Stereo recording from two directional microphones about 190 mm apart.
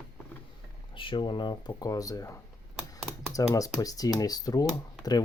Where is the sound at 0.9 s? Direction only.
25° left (ahead or behind).